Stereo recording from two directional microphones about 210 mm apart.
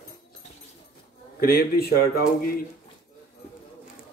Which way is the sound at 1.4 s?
45° left (ahead or behind).